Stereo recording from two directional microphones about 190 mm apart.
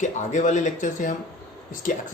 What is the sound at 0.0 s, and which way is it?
Speech, 40° left (ahead or behind).